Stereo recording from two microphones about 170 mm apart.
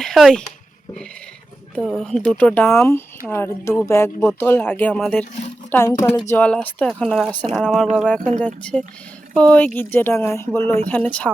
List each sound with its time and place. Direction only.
0.0 s speech: centre (ahead or behind)
1.8 s speech: centre (ahead or behind)
5.9 s a woman's voice: 25° left (ahead or behind)
6.3 s speech: 10° left (ahead or behind)